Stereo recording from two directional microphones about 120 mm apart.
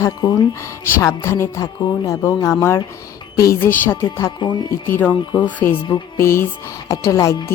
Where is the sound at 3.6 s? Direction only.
15° left (ahead or behind).